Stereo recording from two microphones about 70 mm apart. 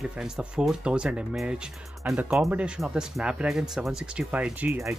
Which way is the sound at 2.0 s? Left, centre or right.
Right.